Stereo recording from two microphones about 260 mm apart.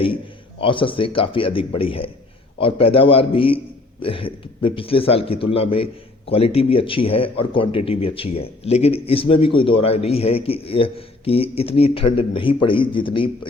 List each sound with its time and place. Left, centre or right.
0.6 s a man's voice: centre